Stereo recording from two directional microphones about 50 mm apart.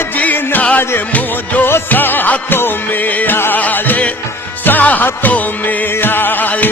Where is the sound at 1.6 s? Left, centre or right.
Left.